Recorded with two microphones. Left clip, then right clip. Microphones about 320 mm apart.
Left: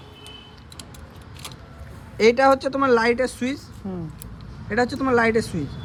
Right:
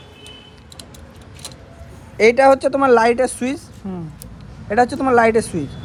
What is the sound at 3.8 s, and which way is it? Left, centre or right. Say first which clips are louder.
Speech: right 2 dB; right.